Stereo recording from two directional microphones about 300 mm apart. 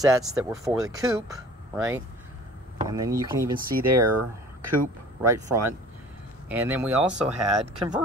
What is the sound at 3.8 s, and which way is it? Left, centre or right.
Speech, right.